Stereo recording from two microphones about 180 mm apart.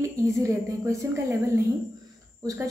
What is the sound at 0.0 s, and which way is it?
A woman's voice, 15° right (ahead or behind).